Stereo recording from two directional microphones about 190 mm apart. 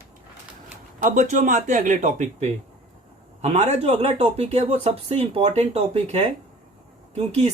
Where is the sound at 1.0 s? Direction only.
40° right (ahead or behind).